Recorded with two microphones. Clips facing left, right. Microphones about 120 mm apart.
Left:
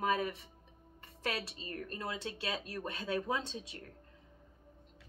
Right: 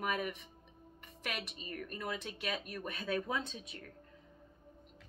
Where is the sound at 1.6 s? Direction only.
25° left (ahead or behind).